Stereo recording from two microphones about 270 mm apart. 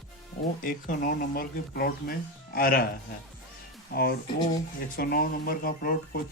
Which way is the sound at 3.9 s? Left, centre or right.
Left.